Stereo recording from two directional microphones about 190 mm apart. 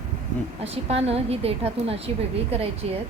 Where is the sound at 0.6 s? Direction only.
30° right (ahead or behind).